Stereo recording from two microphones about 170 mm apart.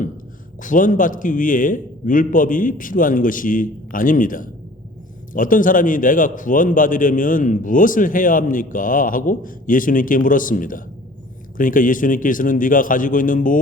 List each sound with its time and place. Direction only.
0.6 s a man's voice: 50° left (ahead or behind)